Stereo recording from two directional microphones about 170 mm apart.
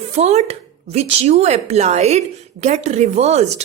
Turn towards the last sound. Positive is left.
turn(degrees=-40)  # may be behind; listen again after turning